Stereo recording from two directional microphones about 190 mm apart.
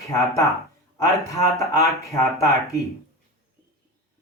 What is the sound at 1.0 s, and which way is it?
Speech, 15° left (ahead or behind).